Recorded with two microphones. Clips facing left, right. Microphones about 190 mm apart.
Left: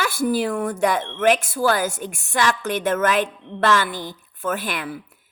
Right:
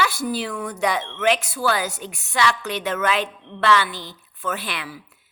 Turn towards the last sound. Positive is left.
turn(degrees=50)  # may be behind; listen again after turning